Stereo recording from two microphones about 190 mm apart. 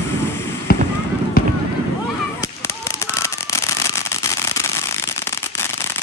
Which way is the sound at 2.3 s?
15° left (ahead or behind).